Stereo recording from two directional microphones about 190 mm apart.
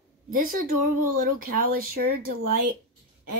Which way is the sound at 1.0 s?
50° right (ahead or behind).